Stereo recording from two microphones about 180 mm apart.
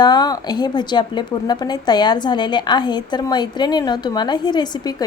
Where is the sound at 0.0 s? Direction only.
20° left (ahead or behind).